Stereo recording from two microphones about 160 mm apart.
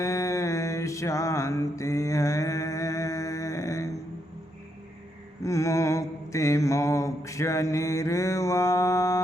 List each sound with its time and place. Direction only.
0.0 s mantra: 20° left (ahead or behind)
5.4 s mantra: 20° left (ahead or behind)